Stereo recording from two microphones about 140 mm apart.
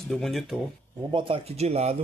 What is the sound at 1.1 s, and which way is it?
Speech, 40° right (ahead or behind).